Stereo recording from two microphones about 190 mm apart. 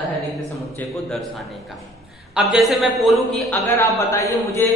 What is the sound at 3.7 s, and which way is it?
Speech, 15° left (ahead or behind).